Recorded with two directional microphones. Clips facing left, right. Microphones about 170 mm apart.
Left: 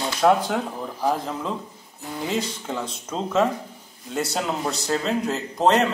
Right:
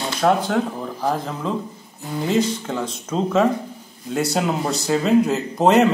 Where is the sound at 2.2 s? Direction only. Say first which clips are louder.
Right 7 dB; centre (ahead or behind).